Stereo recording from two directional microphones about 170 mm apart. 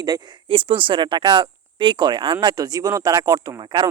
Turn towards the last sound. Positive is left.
turn(degrees=-25)  # may be behind; listen again after turning